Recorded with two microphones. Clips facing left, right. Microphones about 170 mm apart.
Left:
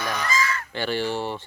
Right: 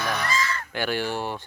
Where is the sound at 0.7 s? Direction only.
10° right (ahead or behind).